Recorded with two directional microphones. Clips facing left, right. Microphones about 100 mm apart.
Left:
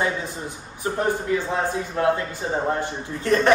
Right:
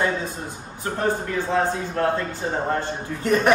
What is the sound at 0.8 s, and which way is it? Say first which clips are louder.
A man's voice: left 1 dB; 15° left (ahead or behind).